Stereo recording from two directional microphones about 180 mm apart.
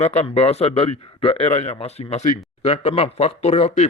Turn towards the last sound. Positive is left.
turn(degrees=35)  # may be behind; listen again after turning